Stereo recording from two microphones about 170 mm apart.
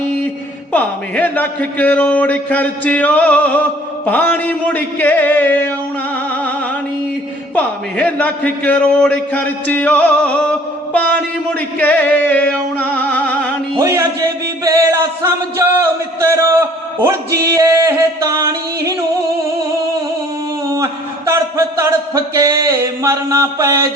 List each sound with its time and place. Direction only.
0.7 s a man's voice: 10° left (ahead or behind)
7.5 s a man's voice: 10° left (ahead or behind)
11.8 s music: 10° left (ahead or behind)
13.7 s music: 15° right (ahead or behind)
14.6 s speech: 15° right (ahead or behind)
20.7 s a sound: 15° right (ahead or behind)